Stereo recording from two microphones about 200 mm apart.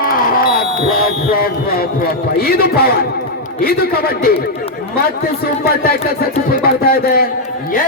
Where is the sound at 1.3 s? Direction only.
50° left (ahead or behind).